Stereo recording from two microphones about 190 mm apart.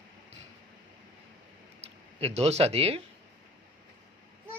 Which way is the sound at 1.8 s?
35° right (ahead or behind).